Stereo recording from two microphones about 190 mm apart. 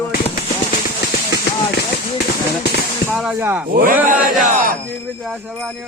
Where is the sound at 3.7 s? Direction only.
50° right (ahead or behind).